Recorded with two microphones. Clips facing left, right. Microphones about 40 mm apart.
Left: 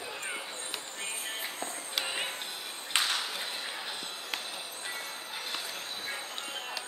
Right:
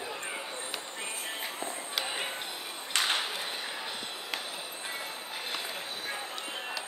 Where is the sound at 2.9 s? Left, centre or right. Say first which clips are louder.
Even; left.